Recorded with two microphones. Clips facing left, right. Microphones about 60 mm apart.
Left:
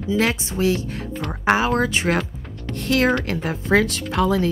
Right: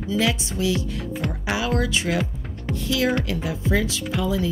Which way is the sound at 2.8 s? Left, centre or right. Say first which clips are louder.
Left 4 dB; left.